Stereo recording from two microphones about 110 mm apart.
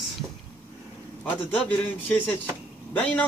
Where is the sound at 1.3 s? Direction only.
15° left (ahead or behind).